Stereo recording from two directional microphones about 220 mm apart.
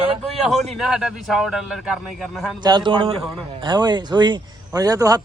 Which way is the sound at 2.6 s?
20° right (ahead or behind).